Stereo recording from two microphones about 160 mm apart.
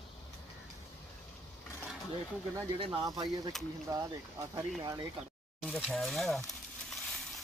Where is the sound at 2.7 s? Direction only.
25° right (ahead or behind).